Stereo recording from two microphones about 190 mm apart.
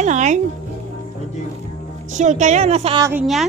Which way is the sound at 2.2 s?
40° right (ahead or behind).